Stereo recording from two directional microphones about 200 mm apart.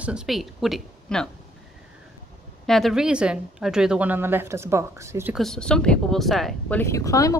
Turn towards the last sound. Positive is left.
turn(degrees=15)  # may be behind; listen again after turning